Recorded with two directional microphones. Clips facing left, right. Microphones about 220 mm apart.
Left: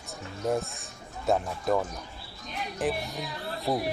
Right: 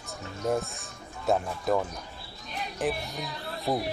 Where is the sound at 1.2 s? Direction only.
Centre (ahead or behind).